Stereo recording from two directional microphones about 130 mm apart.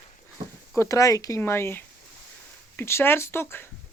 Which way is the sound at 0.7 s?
25° left (ahead or behind).